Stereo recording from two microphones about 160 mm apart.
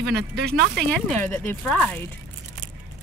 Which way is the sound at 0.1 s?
85° right.